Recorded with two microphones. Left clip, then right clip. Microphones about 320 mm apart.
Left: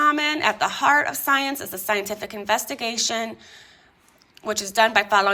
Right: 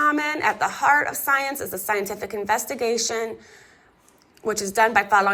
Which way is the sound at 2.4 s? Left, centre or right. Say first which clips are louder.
Right 1 dB; centre.